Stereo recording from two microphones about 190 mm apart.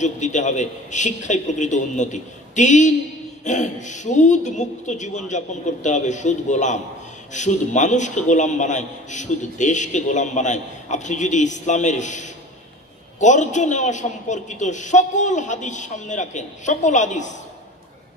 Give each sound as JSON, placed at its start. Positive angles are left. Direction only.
{"t": 0.0, "sound": "a man's voice", "side_deg": 40}